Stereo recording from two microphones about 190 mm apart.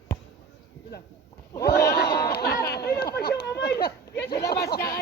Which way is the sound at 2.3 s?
55° left (ahead or behind).